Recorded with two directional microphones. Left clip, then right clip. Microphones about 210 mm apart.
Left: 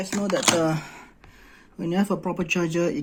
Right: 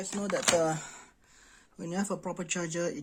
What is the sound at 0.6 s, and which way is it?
Speech, centre (ahead or behind).